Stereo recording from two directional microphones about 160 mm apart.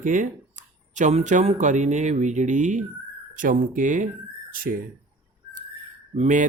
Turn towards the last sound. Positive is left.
turn(degrees=-45)  # may be behind; listen again after turning